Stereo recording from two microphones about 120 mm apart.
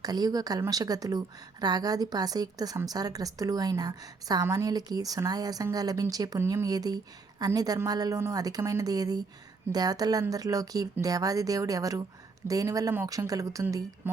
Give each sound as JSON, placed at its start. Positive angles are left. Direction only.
{"t": 0.0, "sound": "a woman's voice", "side_deg": -35}